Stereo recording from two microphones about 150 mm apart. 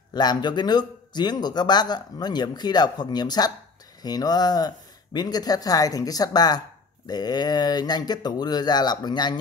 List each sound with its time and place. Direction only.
0.1 s speech: 30° left (ahead or behind)